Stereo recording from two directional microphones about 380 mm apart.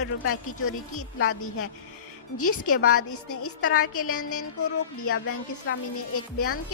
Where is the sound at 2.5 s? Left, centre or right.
Left.